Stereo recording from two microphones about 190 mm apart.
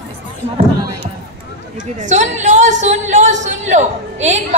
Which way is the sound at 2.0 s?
40° right (ahead or behind).